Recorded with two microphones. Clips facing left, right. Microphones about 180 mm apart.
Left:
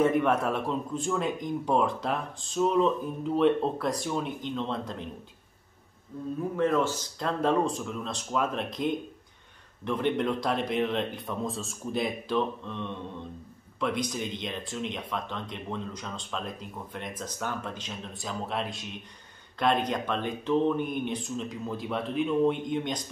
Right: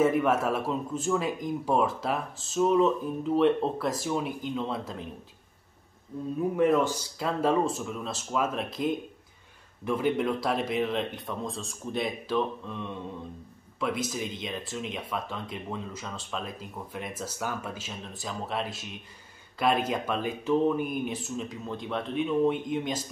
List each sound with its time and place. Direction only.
0.0 s speech: 5° right (ahead or behind)
6.5 s speech: 15° right (ahead or behind)